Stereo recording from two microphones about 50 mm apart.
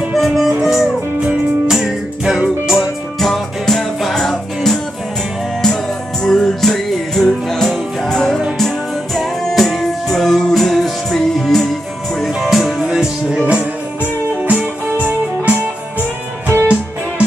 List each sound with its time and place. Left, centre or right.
0.1 s music: centre
1.9 s music: centre
2.7 s music: centre
6.2 s music: centre
12.9 s music: centre
14.4 s music: right
16.5 s music: right